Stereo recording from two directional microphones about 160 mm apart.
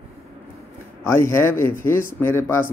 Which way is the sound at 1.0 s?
15° left (ahead or behind).